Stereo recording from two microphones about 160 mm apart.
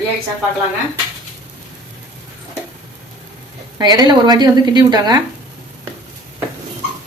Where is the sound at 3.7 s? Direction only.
25° right (ahead or behind).